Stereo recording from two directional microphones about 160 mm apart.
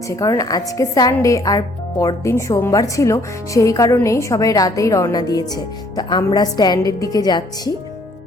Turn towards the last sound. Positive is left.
turn(degrees=25)  # may be behind; listen again after turning